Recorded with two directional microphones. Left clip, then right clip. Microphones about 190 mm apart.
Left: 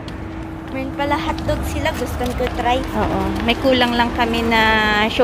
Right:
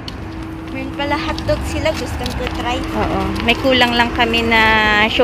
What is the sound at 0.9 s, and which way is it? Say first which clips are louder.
Speech: even; 30° left (ahead or behind).